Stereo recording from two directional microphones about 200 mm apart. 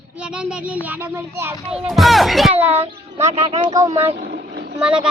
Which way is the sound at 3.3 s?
30° right (ahead or behind).